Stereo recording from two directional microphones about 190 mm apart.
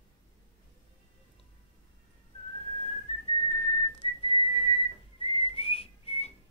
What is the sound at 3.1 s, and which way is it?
Whistling, 35° left (ahead or behind).